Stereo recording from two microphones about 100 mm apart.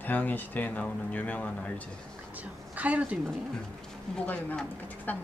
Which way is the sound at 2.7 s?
15° right (ahead or behind).